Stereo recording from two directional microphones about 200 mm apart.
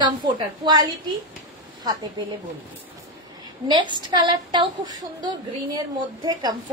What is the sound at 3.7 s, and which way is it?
A woman's voice, 25° right (ahead or behind).